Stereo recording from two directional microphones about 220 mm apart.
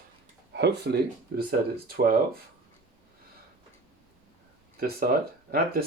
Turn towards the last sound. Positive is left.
turn(degrees=-45)  # may be behind; listen again after turning